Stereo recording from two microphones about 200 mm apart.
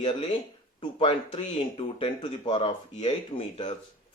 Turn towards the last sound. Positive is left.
turn(degrees=25)  # may be behind; listen again after turning